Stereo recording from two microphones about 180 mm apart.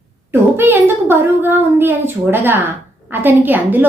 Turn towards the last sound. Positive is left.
turn(degrees=-10)  # may be behind; listen again after turning